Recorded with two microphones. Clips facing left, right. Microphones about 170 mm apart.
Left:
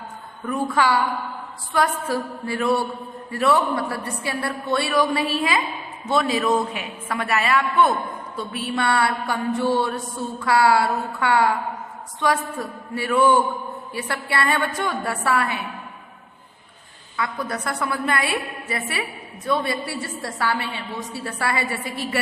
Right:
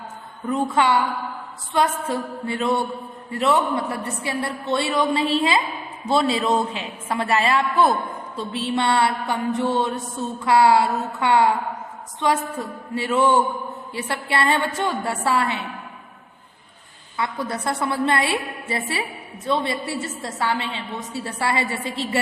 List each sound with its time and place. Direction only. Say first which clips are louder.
0.4 s a woman's voice: right 1 dB; 20° right (ahead or behind)
17.2 s a woman's voice: right 1 dB; 25° right (ahead or behind)